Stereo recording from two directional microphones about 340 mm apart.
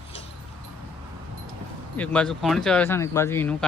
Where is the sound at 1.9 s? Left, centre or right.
Centre.